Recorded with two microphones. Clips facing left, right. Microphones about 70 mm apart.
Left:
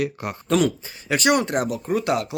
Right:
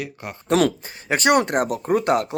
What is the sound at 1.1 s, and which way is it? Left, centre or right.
Speech, right.